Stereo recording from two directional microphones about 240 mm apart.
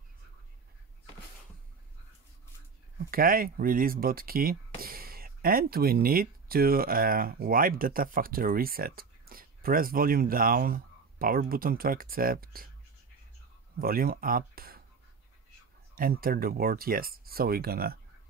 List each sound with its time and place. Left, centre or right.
3.1 s speech: right
13.7 s speech: right
15.9 s speech: right